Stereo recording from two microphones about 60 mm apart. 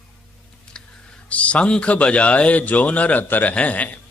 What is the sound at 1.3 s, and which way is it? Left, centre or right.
A man's voice, left.